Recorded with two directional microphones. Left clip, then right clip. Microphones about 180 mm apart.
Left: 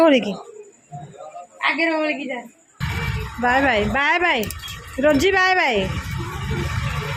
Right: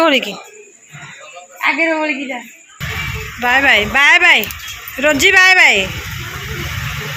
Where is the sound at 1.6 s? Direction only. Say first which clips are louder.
Right 5 dB; 45° right (ahead or behind).